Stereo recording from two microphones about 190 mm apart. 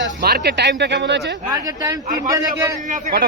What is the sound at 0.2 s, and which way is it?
Speech, 55° right (ahead or behind).